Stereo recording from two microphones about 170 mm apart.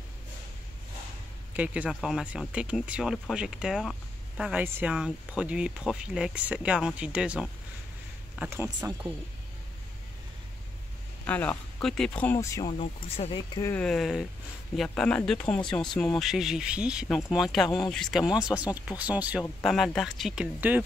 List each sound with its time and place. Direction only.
1.6 s speech: 10° right (ahead or behind)
11.2 s speech: 10° left (ahead or behind)
12.7 s speech: 35° left (ahead or behind)
13.6 s speech: 15° left (ahead or behind)
13.8 s speech: centre (ahead or behind)